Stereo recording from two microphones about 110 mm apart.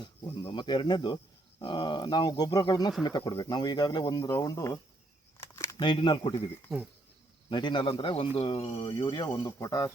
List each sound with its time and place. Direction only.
0.5 s speech: 45° left (ahead or behind)
5.4 s a sound: 25° left (ahead or behind)
5.7 s speech: 45° left (ahead or behind)
7.5 s speech: 45° left (ahead or behind)
8.1 s speech: 65° left (ahead or behind)
8.9 s speech: 40° left (ahead or behind)